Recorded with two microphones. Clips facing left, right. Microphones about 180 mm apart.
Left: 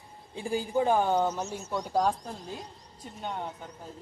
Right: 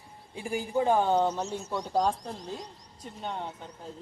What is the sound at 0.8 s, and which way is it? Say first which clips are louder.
Speech: right 1 dB; 20° right (ahead or behind).